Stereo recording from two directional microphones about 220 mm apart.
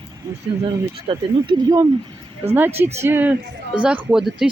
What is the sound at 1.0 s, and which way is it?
Speech, 20° right (ahead or behind).